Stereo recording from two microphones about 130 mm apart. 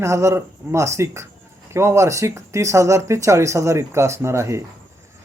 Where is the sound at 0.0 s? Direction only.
20° right (ahead or behind).